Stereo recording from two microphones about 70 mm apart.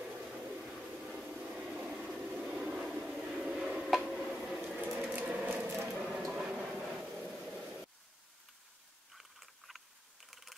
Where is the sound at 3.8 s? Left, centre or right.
Centre.